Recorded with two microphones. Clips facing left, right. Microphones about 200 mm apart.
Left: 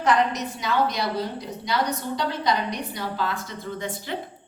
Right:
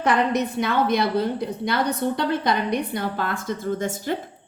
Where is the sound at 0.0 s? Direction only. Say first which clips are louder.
Right 2 dB; 55° right (ahead or behind).